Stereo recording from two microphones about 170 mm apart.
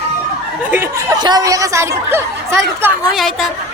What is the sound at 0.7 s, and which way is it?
Speech, 10° right (ahead or behind).